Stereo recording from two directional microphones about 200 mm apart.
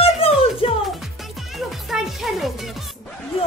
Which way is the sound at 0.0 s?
30° left (ahead or behind).